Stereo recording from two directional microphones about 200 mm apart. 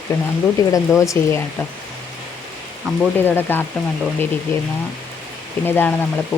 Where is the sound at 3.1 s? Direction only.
10° left (ahead or behind).